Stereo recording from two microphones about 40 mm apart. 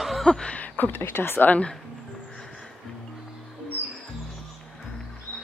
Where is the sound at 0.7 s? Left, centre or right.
Left.